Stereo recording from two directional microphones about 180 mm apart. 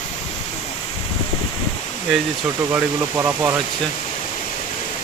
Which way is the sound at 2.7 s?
10° right (ahead or behind).